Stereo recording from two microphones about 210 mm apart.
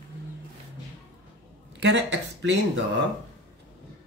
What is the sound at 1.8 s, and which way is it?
Speech, 55° right (ahead or behind).